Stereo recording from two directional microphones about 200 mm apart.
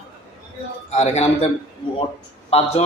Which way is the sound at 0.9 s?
35° left (ahead or behind).